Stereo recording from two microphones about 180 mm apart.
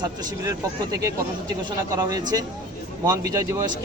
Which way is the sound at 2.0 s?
20° right (ahead or behind).